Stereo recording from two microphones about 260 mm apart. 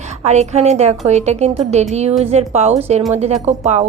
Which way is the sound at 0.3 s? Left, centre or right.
Right.